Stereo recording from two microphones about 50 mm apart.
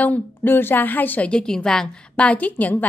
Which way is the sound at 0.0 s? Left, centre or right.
Left.